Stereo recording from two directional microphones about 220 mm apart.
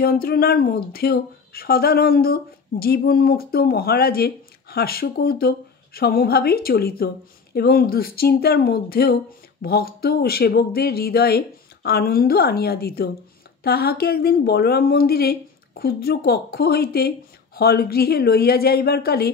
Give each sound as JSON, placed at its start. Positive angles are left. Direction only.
{"t": 0.0, "sound": "speech", "side_deg": 45}